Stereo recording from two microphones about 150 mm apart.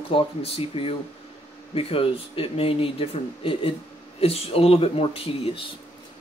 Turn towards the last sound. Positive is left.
turn(degrees=40)  # may be behind; listen again after turning